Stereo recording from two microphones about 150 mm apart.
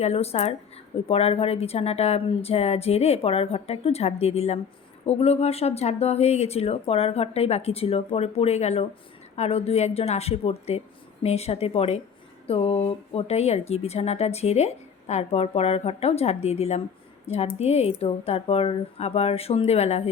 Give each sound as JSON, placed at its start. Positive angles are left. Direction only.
{"t": 0.0, "sound": "speech", "side_deg": 45}